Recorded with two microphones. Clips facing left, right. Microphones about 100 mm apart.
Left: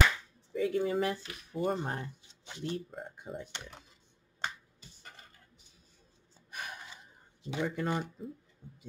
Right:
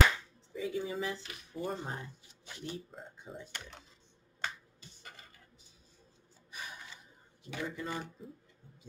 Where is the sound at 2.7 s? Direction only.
60° left (ahead or behind).